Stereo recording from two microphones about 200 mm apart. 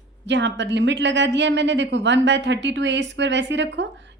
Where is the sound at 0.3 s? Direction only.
65° right (ahead or behind).